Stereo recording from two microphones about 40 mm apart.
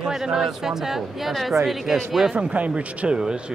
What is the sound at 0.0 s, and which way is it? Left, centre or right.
Speech, centre.